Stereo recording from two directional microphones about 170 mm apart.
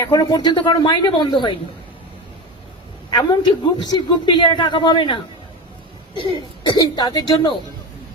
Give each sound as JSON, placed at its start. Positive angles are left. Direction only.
{"t": 0.0, "sound": "a man's voice", "side_deg": 25}
{"t": 3.1, "sound": "a man's voice", "side_deg": 25}
{"t": 6.7, "sound": "a man's voice", "side_deg": 25}